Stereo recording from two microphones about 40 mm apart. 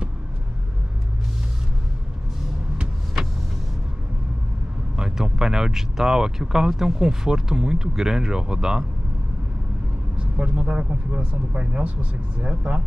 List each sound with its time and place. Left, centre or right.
4.9 s speech: centre
10.3 s speech: right